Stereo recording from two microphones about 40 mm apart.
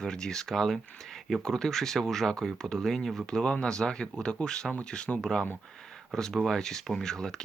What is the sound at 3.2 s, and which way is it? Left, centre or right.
Speech, centre.